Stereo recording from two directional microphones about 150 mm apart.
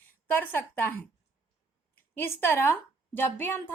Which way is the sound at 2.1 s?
15° left (ahead or behind).